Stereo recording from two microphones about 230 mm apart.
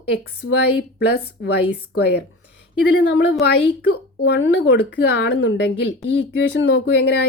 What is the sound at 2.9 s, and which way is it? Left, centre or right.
Speech, left.